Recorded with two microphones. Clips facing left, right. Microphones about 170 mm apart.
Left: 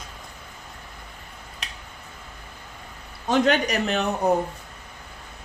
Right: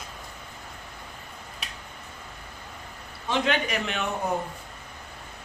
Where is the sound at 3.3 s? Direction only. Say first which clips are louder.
Left 5 dB; 45° left (ahead or behind).